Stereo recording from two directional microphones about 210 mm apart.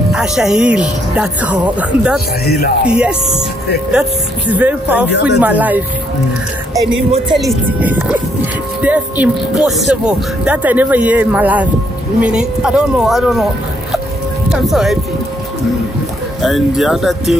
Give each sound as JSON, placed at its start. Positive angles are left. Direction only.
{"t": 0.1, "sound": "speech", "side_deg": -5}
{"t": 2.4, "sound": "music", "side_deg": 45}
{"t": 2.8, "sound": "speech", "side_deg": -5}
{"t": 5.1, "sound": "speech", "side_deg": 55}
{"t": 5.4, "sound": "speech", "side_deg": -10}
{"t": 7.4, "sound": "speech", "side_deg": -10}
{"t": 14.5, "sound": "speech", "side_deg": 0}
{"t": 16.3, "sound": "speech", "side_deg": 0}